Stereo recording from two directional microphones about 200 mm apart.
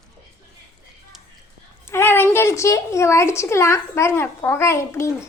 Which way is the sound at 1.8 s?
10° left (ahead or behind).